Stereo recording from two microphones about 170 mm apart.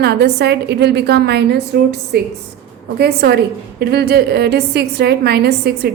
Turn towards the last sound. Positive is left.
turn(degrees=-70)  # may be behind; listen again after turning